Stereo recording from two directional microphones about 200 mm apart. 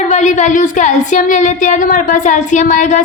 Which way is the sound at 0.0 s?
35° left (ahead or behind).